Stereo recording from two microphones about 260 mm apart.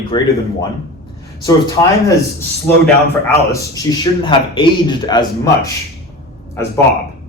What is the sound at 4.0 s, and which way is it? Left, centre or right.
A man's voice, centre.